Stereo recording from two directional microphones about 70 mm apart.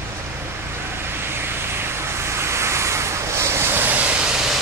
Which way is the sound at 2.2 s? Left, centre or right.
Right.